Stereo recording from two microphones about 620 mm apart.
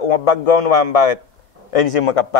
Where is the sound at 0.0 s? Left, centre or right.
Left.